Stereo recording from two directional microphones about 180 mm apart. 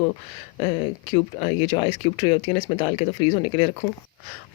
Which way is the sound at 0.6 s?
30° left (ahead or behind).